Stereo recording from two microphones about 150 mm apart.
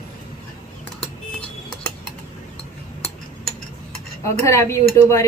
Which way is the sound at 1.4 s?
10° left (ahead or behind).